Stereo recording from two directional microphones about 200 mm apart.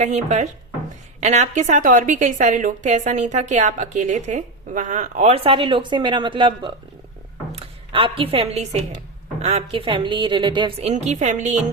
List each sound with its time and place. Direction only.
0.0 s a woman's voice: 35° right (ahead or behind)